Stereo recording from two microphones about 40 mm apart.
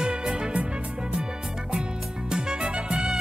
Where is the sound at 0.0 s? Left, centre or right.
Centre.